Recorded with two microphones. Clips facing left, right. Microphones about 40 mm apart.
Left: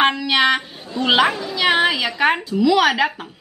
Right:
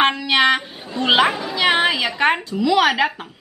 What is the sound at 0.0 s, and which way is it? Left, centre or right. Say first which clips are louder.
Speech: even; centre.